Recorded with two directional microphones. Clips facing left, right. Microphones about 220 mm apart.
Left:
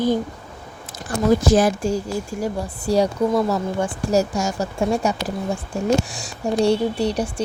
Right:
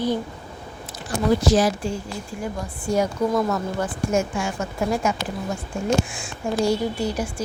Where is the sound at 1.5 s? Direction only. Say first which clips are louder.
Left 3 dB; 50° left (ahead or behind).